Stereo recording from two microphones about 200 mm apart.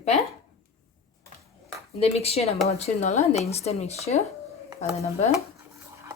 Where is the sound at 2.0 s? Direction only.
30° left (ahead or behind).